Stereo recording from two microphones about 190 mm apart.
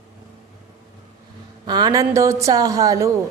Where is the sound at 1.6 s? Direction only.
20° right (ahead or behind).